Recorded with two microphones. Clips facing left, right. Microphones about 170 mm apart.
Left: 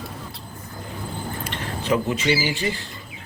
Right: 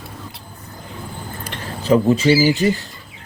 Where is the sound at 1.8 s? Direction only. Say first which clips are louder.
Right 8 dB; 35° right (ahead or behind).